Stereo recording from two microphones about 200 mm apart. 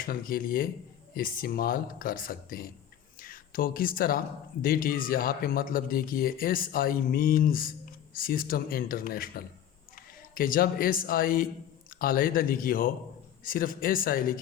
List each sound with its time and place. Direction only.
0.0 s speech: 45° left (ahead or behind)